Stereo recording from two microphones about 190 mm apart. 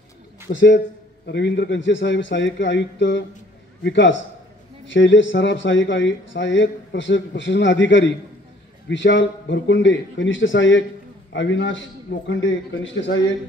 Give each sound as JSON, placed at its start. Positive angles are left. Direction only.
{"t": 0.5, "sound": "speech", "side_deg": 75}